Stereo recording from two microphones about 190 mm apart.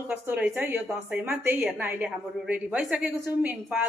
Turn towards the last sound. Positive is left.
turn(degrees=-5)  # may be behind; listen again after turning